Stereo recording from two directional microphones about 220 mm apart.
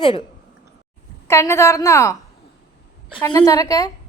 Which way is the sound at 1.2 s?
10° left (ahead or behind).